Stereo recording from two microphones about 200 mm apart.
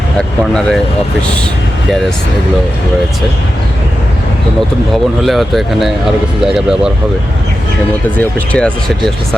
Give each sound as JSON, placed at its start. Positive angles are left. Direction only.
{"t": 0.2, "sound": "speech", "side_deg": 5}
{"t": 5.2, "sound": "speech", "side_deg": 0}
{"t": 8.2, "sound": "speech", "side_deg": 5}